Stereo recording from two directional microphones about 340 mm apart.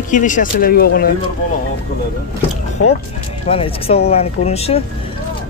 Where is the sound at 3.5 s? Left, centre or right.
Centre.